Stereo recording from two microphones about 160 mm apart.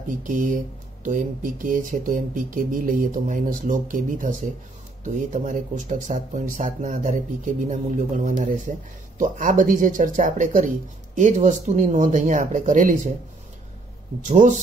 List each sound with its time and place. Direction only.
0.2 s speech: 55° right (ahead or behind)
14.2 s speech: 50° right (ahead or behind)